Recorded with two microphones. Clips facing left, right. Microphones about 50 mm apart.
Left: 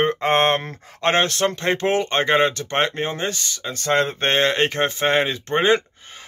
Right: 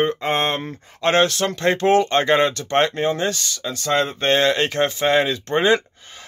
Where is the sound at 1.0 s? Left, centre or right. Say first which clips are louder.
Right 1 dB; left.